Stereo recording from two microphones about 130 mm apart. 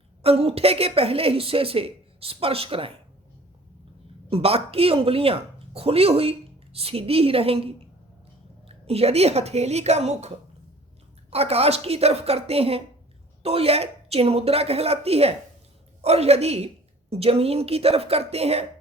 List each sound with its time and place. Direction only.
0.2 s a woman's voice: 50° right (ahead or behind)
4.3 s a woman's voice: 50° right (ahead or behind)